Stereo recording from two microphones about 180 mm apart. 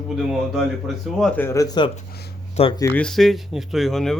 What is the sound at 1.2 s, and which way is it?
A man's voice, 10° left (ahead or behind).